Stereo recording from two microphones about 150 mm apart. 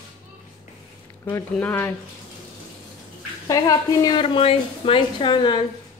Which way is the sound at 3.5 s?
25° left (ahead or behind).